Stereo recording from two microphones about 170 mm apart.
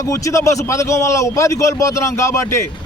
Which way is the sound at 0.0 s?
20° left (ahead or behind).